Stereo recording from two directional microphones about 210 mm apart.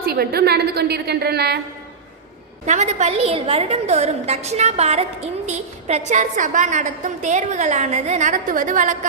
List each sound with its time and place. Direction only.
0.0 s a woman's voice: 45° right (ahead or behind)
2.6 s a woman's voice: 35° right (ahead or behind)